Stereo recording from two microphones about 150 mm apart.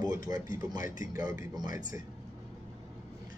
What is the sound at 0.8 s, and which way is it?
Speech, 65° left (ahead or behind).